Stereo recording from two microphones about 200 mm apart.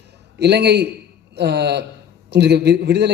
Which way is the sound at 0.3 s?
55° right (ahead or behind).